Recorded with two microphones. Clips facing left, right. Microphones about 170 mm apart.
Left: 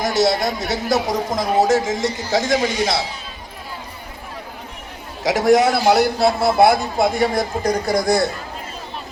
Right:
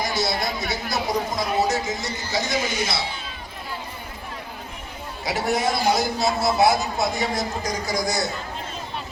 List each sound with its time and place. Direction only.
0.0 s a sound: 90° left
0.6 s a man's voice: 90° left
5.2 s a man's voice: 90° left; by 8.3 s 60° left (ahead or behind)